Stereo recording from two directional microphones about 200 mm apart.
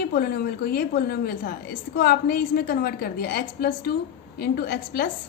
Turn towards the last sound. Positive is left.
turn(degrees=50)  # may be behind; listen again after turning